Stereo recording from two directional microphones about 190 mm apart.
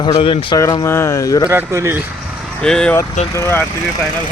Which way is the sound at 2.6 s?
5° left (ahead or behind).